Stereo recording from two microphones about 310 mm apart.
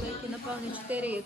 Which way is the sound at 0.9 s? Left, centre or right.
Centre.